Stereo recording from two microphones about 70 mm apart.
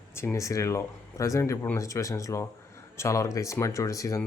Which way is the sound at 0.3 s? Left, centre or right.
Left.